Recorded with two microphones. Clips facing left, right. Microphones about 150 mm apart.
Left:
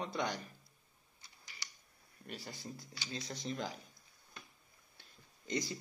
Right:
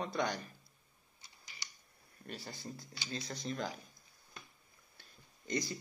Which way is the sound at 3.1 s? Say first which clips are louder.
Right 1 dB; 20° left (ahead or behind).